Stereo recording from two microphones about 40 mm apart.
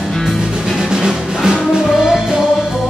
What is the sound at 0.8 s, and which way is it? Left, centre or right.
Music, centre.